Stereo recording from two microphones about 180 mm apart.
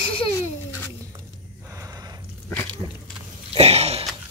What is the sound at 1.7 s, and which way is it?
Horse, 15° right (ahead or behind).